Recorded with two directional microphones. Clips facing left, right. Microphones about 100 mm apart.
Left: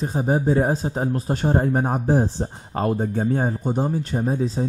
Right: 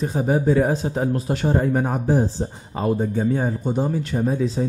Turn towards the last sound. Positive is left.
turn(degrees=35)  # may be behind; listen again after turning